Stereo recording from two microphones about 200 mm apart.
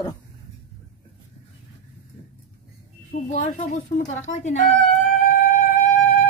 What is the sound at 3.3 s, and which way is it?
A woman's voice, 35° left (ahead or behind).